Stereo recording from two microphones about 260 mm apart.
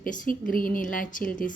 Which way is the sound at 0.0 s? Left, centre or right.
Left.